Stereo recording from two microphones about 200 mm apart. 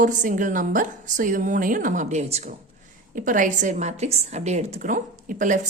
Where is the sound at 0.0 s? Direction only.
40° right (ahead or behind).